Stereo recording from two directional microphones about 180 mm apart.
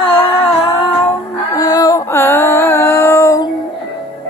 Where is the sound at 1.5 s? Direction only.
20° left (ahead or behind).